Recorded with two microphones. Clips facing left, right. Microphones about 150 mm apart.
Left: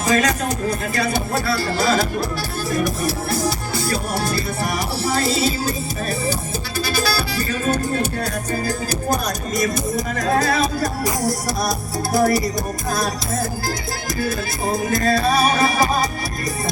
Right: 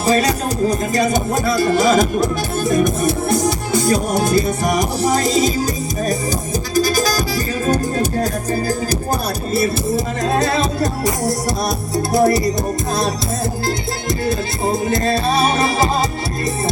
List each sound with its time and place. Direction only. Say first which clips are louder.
0.0 s music: right 3 dB; 35° right (ahead or behind)
0.7 s music: right 5 dB; 15° right (ahead or behind)
6.7 s music: right 6 dB; 40° right (ahead or behind); by 12.4 s 20° right (ahead or behind)
14.3 s music: right 4 dB; 25° right (ahead or behind)